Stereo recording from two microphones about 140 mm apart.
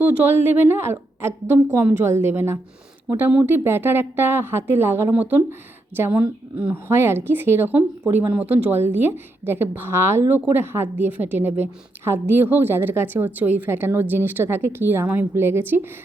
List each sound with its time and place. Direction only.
0.0 s speech: 15° right (ahead or behind)